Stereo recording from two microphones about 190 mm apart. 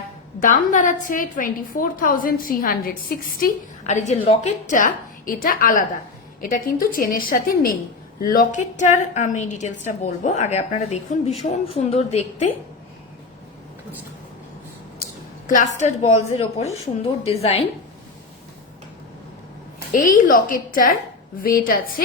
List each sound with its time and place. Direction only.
0.4 s a woman's voice: 45° left (ahead or behind)
15.4 s a woman's voice: 40° left (ahead or behind)
19.9 s a woman's voice: 45° left (ahead or behind)